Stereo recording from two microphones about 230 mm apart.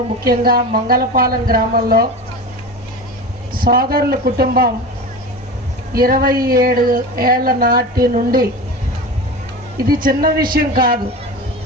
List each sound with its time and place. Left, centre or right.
0.3 s speech: right
3.5 s speech: right
5.9 s speech: right
9.9 s speech: right